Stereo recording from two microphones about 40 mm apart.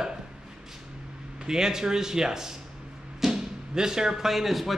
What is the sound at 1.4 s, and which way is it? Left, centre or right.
A man's voice, centre.